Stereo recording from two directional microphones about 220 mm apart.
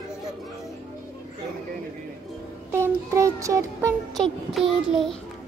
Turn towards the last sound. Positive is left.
turn(degrees=0)  # may be behind; listen again after turning